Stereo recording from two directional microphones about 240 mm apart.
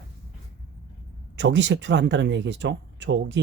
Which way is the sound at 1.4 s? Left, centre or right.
Right.